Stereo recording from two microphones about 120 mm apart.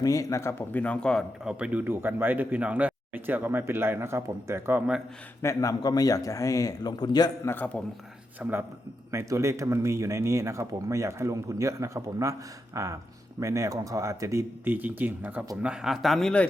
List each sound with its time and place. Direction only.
0.0 s a man's voice: 30° left (ahead or behind)
0.8 s speech: 10° left (ahead or behind)
1.5 s speech: 10° right (ahead or behind)
5.4 s a man's voice: 25° left (ahead or behind)
7.4 s speech: 15° left (ahead or behind)
8.4 s speech: 15° right (ahead or behind)
9.1 s speech: 25° right (ahead or behind); by 16.5 s 5° left (ahead or behind)